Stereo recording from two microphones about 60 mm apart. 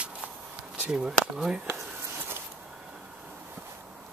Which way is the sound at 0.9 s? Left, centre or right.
Centre.